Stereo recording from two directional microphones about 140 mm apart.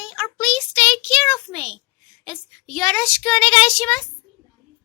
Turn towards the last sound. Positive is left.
turn(degrees=5)  # may be behind; listen again after turning